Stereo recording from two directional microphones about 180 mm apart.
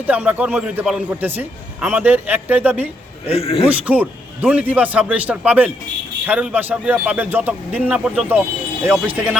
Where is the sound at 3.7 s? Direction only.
10° right (ahead or behind).